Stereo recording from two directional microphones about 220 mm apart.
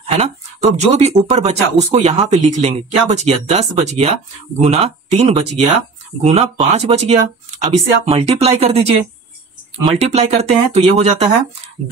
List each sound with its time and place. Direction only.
0.0 s speech: 30° right (ahead or behind)
9.9 s speech: 30° right (ahead or behind)